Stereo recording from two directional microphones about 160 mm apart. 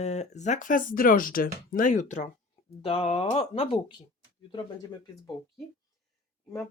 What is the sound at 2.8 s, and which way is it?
Speech, 35° left (ahead or behind).